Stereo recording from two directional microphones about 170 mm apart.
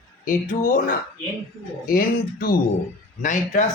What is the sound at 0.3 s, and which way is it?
Speech, 55° left (ahead or behind).